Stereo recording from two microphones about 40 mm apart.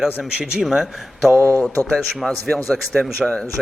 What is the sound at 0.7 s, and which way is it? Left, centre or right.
A man's voice, centre.